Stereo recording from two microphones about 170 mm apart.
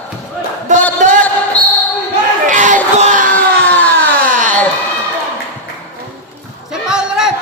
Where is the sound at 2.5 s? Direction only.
50° right (ahead or behind).